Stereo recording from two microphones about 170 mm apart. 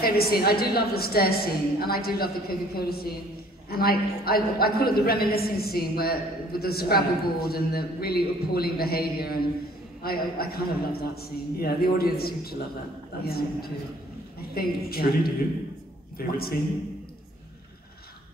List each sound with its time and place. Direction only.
0.0 s a woman's voice: 65° left (ahead or behind)